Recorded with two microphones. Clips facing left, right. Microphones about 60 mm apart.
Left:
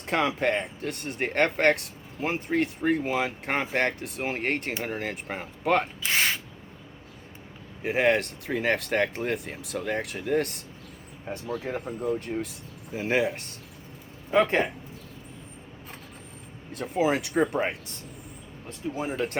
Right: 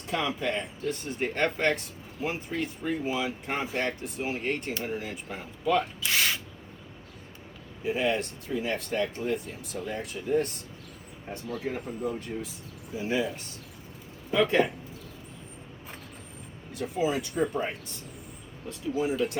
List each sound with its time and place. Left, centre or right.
0.0 s speech: left
6.0 s a sound: left
7.8 s speech: left
11.4 s speech: left
12.2 s speech: left
14.3 s speech: left
16.7 s speech: left
18.7 s speech: left